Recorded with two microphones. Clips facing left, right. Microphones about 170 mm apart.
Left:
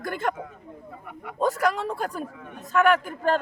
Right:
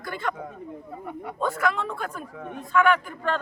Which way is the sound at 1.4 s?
40° left (ahead or behind).